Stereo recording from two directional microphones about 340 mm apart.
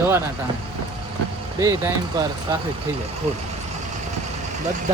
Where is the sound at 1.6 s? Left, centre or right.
Centre.